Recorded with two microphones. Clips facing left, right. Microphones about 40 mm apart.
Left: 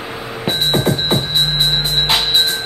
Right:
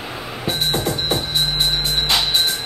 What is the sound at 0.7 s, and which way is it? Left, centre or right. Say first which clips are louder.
Music: left 7 dB; left.